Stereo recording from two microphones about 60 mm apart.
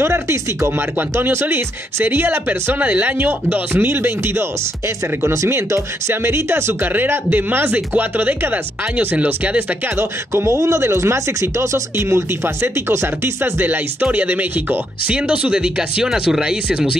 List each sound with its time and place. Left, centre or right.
0.0 s speech: right
9.9 s speech: right; by 16.9 s centre